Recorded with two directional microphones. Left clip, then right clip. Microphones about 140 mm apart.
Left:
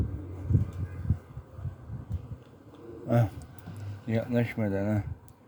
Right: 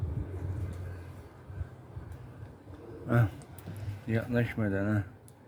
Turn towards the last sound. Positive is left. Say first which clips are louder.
# left 2 dB
turn(degrees=15)  # may be behind; listen again after turning